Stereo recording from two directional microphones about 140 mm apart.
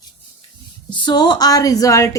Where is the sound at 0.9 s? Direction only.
35° left (ahead or behind).